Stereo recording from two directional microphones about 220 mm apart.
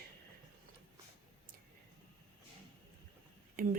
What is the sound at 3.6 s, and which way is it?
Speech, 40° right (ahead or behind).